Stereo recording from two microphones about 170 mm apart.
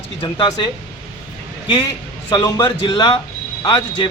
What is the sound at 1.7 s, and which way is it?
A man's voice, 25° left (ahead or behind).